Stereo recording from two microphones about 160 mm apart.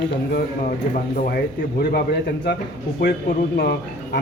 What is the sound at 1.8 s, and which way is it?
A man's voice, 75° left (ahead or behind).